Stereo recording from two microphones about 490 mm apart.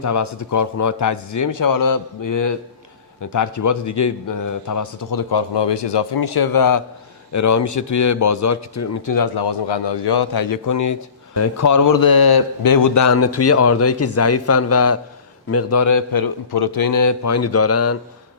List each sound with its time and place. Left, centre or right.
0.0 s a man's voice: left